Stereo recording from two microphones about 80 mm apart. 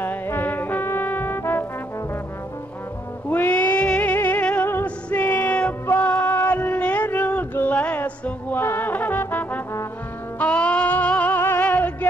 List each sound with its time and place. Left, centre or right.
0.0 s music: left
3.3 s a sound: left
4.8 s music: left